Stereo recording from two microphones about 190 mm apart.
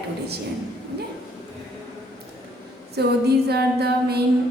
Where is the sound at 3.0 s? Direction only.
60° right (ahead or behind).